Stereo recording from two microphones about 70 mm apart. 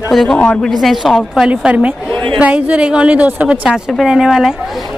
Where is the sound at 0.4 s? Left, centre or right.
Centre.